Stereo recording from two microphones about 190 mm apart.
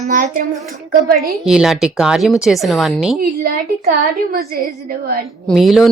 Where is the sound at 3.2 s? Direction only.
50° right (ahead or behind).